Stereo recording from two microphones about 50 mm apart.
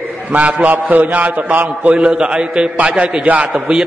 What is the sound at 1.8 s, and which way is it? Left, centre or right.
A man's voice, right.